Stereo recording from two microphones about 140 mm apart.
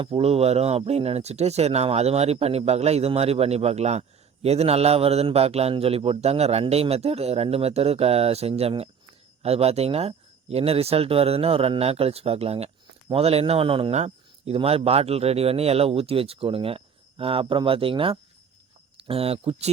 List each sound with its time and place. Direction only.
0.0 s speech: 45° right (ahead or behind)